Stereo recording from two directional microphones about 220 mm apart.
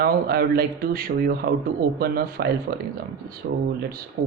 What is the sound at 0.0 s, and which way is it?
Speech, 45° right (ahead or behind).